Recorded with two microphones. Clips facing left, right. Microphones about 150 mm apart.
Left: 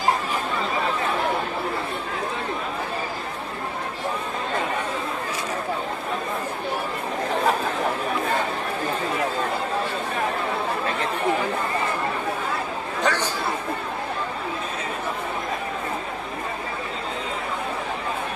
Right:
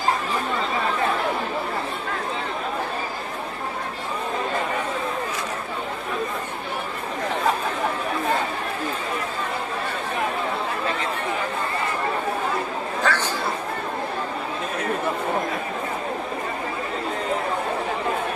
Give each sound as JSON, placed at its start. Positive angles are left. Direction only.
{"t": 13.0, "sound": "chatter", "side_deg": 15}